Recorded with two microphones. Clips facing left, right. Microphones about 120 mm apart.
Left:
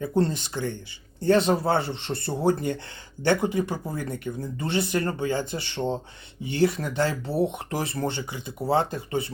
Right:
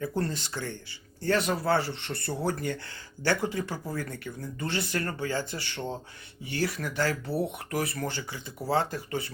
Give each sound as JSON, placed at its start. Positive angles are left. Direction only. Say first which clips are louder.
{"t": 0.0, "sound": "speech", "louder": "left 6 dB", "side_deg": 20}